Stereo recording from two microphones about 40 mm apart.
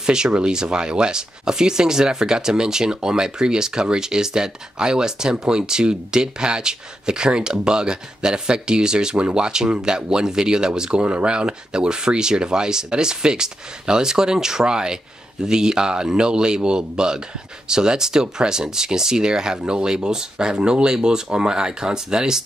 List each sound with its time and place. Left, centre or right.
0.0 s speech: centre